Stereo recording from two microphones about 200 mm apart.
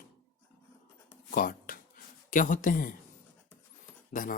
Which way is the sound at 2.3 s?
40° left (ahead or behind).